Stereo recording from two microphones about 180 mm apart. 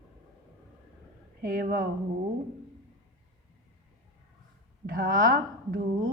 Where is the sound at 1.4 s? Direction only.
55° right (ahead or behind).